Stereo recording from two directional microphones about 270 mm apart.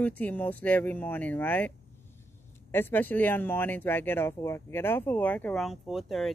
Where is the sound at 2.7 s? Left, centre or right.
Centre.